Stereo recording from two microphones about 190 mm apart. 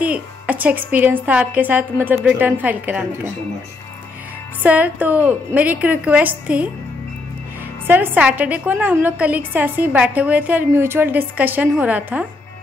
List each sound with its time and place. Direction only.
0.0 s a woman's voice: 10° right (ahead or behind)
4.6 s a woman's voice: 10° right (ahead or behind)
7.8 s a woman's voice: 10° right (ahead or behind)